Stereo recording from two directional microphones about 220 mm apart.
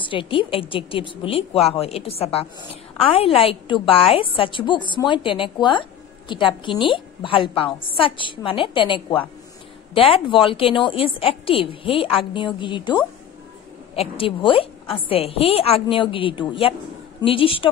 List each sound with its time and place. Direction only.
0.0 s a woman's voice: 25° left (ahead or behind)